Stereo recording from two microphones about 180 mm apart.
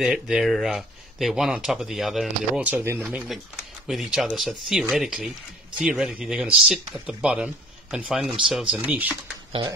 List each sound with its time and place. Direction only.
0.0 s speech: 5° right (ahead or behind)
9.5 s speech: 25° right (ahead or behind)